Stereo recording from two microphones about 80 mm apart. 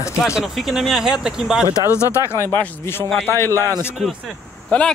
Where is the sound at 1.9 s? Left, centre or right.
Left.